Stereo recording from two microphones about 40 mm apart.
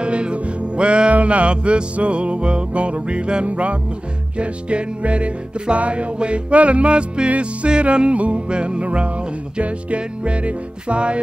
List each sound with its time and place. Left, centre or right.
0.0 s music: right